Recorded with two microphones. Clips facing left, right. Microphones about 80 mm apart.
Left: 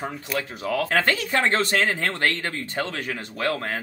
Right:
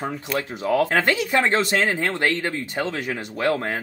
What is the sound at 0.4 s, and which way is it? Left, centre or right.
Speech, right.